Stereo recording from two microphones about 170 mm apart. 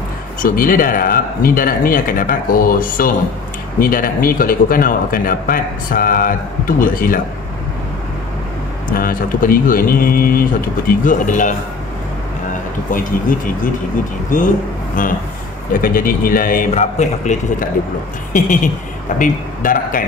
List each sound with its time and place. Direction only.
0.4 s speech: 55° left (ahead or behind)
8.9 s a man's voice: 55° left (ahead or behind)
14.3 s a man's voice: 45° left (ahead or behind)